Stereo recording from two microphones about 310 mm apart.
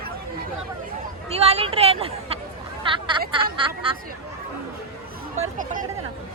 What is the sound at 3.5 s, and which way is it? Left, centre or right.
Hubbub, centre.